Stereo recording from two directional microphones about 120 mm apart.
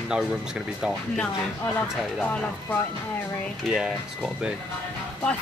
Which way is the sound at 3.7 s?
5° right (ahead or behind).